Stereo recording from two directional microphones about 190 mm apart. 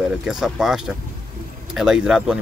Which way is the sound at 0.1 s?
5° right (ahead or behind).